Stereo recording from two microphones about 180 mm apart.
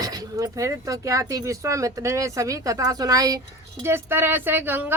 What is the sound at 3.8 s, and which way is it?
Speech, 15° right (ahead or behind).